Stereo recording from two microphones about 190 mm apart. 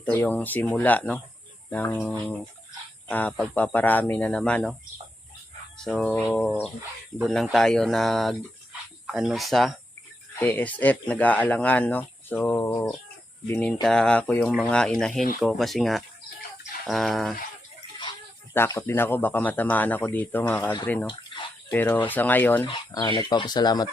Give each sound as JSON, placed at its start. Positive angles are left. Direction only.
{"t": 0.0, "sound": "speech", "side_deg": 10}
{"t": 5.8, "sound": "speech", "side_deg": 0}
{"t": 10.3, "sound": "speech", "side_deg": 10}
{"t": 18.5, "sound": "speech", "side_deg": 15}
{"t": 22.6, "sound": "speech", "side_deg": 25}